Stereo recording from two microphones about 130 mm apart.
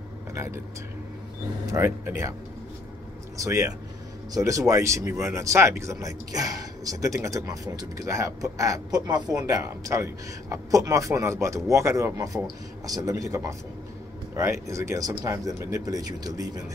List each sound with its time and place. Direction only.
0.3 s speech: 20° right (ahead or behind)
1.7 s speech: 20° right (ahead or behind)
3.4 s speech: 25° right (ahead or behind)